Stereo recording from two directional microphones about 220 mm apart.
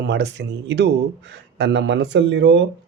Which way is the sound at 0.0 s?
50° right (ahead or behind).